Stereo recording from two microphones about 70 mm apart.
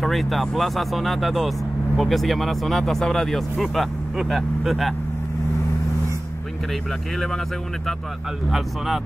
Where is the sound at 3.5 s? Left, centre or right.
Centre.